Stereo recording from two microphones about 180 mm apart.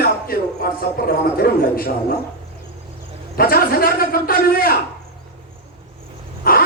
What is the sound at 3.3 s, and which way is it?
Speech, 55° left (ahead or behind).